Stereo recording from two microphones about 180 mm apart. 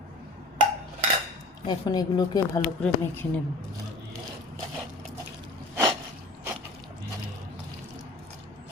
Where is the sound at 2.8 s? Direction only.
10° left (ahead or behind).